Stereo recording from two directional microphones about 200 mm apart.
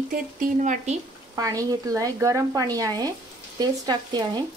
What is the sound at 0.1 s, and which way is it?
Speech, 40° right (ahead or behind).